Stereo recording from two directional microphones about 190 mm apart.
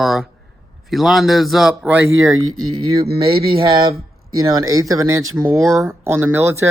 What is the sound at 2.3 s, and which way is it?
Speech, 90° right.